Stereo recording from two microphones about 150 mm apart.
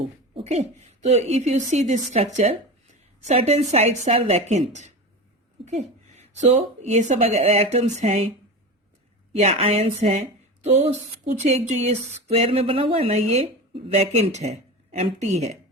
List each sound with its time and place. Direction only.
0.4 s a woman's voice: 50° right (ahead or behind)
9.3 s a woman's voice: 45° right (ahead or behind)